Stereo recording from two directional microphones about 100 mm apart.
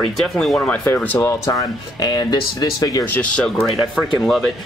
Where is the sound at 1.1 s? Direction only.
30° left (ahead or behind).